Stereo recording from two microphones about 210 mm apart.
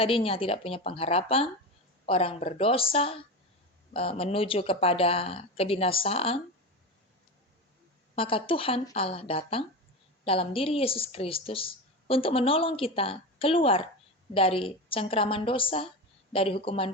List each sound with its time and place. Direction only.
0.0 s a woman's voice: 25° left (ahead or behind)
8.1 s a woman's voice: 25° left (ahead or behind)